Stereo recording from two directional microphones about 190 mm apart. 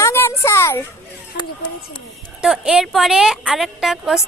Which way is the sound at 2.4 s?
5° right (ahead or behind).